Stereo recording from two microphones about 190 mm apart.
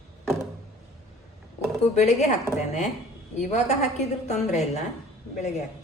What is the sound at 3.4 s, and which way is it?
A woman's voice, 35° left (ahead or behind).